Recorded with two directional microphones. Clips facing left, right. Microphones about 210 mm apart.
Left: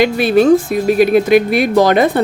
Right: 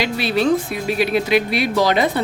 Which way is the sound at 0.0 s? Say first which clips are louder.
Left 8 dB; 50° left (ahead or behind).